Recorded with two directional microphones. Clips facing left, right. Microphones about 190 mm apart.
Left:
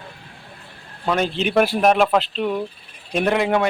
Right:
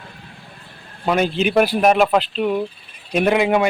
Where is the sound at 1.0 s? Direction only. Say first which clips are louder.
Right 3 dB; 10° right (ahead or behind).